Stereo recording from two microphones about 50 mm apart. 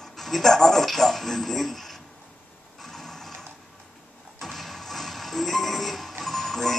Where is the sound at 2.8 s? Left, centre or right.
Centre.